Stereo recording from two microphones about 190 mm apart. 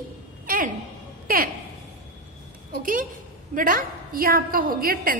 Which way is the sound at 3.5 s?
45° right (ahead or behind).